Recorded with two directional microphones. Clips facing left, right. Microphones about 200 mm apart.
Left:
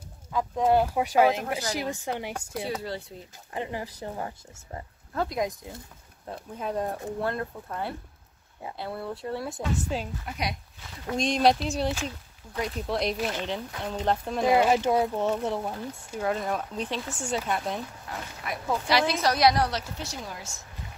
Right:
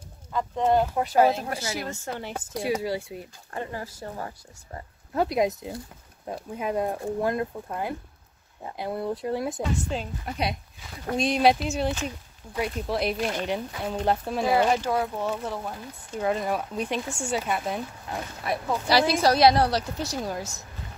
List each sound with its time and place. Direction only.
0.3 s speech: 5° left (ahead or behind)
2.5 s speech: 10° right (ahead or behind)
3.5 s speech: 15° left (ahead or behind)
5.1 s speech: 20° right (ahead or behind)
6.2 s speech: 10° right (ahead or behind)
9.9 s speech: 5° left (ahead or behind)
10.2 s a woman's voice: 30° right (ahead or behind)
11.1 s speech: 5° right (ahead or behind)
14.5 s speech: 20° left (ahead or behind)
16.2 s speech: 5° right (ahead or behind)
18.4 s a woman's voice: 35° right (ahead or behind)